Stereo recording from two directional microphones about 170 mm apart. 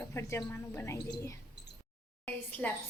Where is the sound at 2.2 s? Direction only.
10° left (ahead or behind).